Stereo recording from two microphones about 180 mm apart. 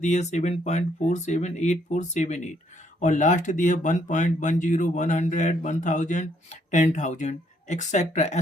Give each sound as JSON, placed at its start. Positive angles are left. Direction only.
{"t": 0.0, "sound": "speech", "side_deg": 40}